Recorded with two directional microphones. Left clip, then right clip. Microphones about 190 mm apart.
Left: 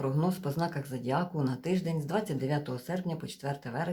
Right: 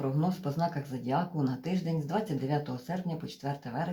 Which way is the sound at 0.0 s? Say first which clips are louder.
Left 1 dB; 35° left (ahead or behind).